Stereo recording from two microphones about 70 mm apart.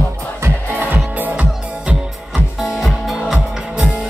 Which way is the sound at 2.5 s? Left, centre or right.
Centre.